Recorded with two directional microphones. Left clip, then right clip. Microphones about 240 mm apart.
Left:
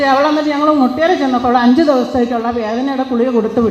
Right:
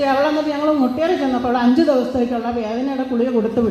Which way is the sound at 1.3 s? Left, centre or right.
Left.